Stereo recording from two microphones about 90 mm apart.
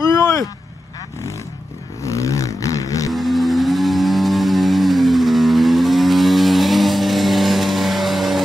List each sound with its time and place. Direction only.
0.1 s vehicle: 35° left (ahead or behind)
2.0 s vehicle: 35° left (ahead or behind)
3.1 s vehicle: centre (ahead or behind)